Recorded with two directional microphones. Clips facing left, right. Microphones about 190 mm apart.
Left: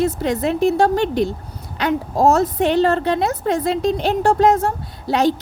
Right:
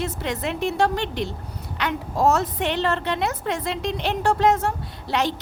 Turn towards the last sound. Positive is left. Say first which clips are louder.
# left 7 dB
turn(degrees=35)  # may be behind; listen again after turning